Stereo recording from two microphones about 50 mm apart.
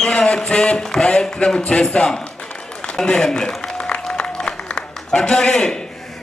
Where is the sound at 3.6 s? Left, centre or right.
Centre.